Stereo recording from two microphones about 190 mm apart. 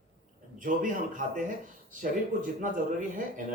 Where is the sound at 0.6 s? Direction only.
45° right (ahead or behind).